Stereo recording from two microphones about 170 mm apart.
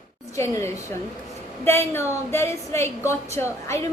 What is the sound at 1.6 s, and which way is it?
A woman's voice, 15° left (ahead or behind).